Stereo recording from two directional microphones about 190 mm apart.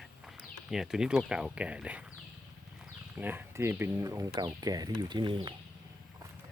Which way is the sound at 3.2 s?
10° right (ahead or behind).